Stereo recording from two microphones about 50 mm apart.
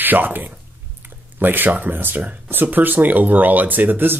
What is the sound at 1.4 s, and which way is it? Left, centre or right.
Speech, right.